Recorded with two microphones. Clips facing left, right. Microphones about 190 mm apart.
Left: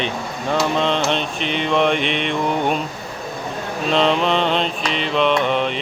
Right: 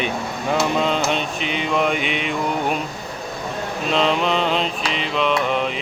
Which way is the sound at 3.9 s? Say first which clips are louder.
Left 2 dB; centre (ahead or behind).